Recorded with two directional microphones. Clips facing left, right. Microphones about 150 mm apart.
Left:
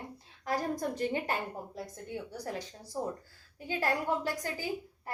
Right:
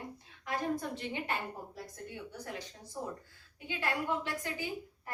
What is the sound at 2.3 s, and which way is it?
Speech, 35° left (ahead or behind).